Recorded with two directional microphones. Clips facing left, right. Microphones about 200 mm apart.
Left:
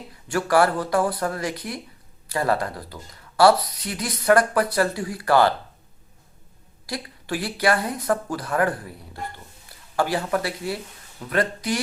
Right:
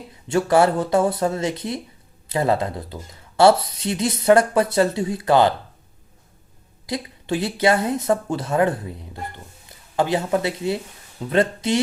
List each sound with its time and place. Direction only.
0.3 s speech: 25° right (ahead or behind)
6.8 s speech: 20° right (ahead or behind)